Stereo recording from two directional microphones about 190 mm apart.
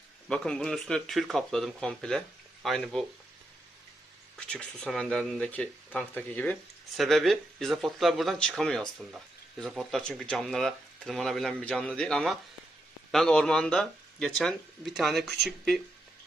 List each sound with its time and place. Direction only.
0.3 s speech: 5° left (ahead or behind)
4.4 s speech: 5° left (ahead or behind)